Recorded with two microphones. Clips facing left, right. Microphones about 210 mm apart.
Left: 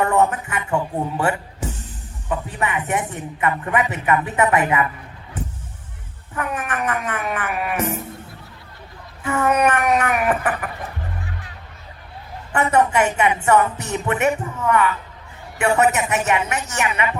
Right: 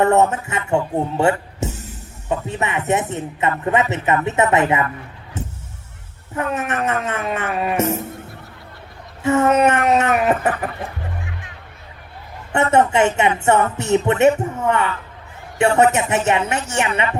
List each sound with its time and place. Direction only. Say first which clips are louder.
0.0 s speech: right 3 dB; 25° right (ahead or behind)
2.3 s music: right 2 dB; 25° right (ahead or behind)
6.3 s music: right 3 dB; 25° right (ahead or behind)
9.2 s music: right 4 dB; 25° right (ahead or behind)
12.7 s music: right 3 dB; 25° right (ahead or behind)